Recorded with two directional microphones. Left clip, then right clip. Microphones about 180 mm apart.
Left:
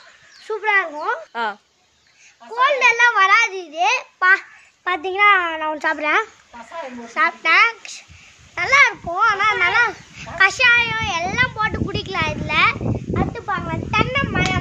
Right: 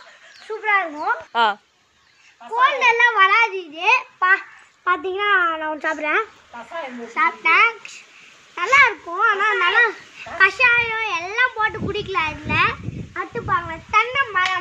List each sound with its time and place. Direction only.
0.5 s dog: 35° left (ahead or behind)
1.3 s speech: 5° right (ahead or behind)
2.6 s a child's voice: 20° left (ahead or behind); by 6.2 s 40° left (ahead or behind)
7.1 s a child's voice: 25° left (ahead or behind)
13.8 s a sound: 5° left (ahead or behind)